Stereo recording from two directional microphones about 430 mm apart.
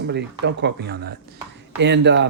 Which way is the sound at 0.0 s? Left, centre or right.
Right.